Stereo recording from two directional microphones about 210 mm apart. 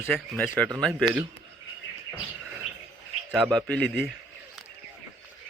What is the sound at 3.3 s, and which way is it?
Speech, centre (ahead or behind).